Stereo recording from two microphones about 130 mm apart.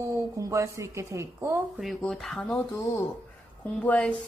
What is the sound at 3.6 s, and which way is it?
Speech, 10° left (ahead or behind).